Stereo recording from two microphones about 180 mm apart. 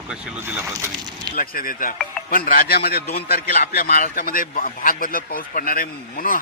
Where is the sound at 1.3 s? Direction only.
50° left (ahead or behind).